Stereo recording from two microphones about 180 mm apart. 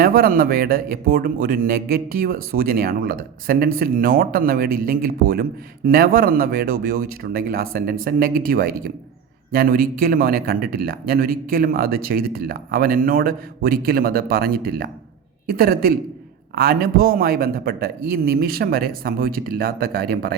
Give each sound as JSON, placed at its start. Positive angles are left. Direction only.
{"t": 0.0, "sound": "speech", "side_deg": -55}